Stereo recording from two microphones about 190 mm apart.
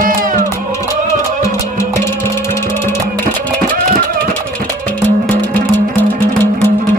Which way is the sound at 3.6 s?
50° right (ahead or behind).